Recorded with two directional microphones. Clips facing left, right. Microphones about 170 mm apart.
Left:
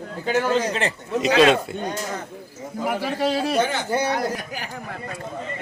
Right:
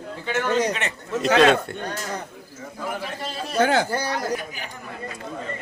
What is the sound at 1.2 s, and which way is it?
Speech, centre (ahead or behind).